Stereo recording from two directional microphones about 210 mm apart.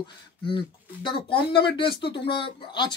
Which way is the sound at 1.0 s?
25° left (ahead or behind).